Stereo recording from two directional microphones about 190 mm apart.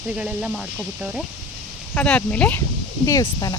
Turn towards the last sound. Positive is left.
turn(degrees=20)  # may be behind; listen again after turning